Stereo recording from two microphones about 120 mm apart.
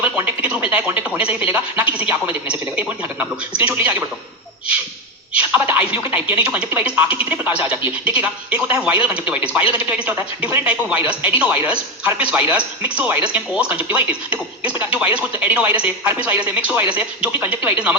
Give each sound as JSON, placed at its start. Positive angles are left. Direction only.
{"t": 0.0, "sound": "speech", "side_deg": -15}
{"t": 5.3, "sound": "speech", "side_deg": -15}